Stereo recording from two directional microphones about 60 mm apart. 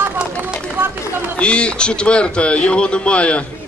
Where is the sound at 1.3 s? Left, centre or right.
Centre.